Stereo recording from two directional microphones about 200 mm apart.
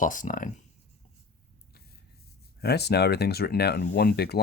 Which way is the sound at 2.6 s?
55° left (ahead or behind).